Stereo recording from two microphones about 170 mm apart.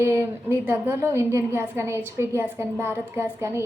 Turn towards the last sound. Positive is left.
turn(degrees=-15)  # may be behind; listen again after turning